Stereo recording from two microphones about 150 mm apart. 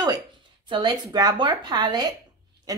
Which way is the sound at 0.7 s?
30° right (ahead or behind).